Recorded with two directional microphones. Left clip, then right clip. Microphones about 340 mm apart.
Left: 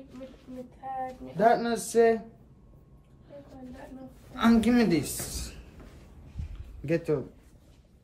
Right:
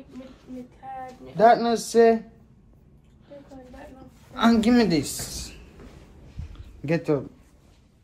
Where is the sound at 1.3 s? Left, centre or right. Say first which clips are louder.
Right 6 dB; centre.